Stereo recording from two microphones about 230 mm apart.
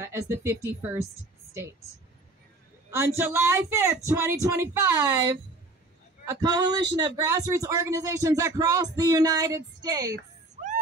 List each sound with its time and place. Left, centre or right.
0.0 s speech: centre
2.9 s speech: centre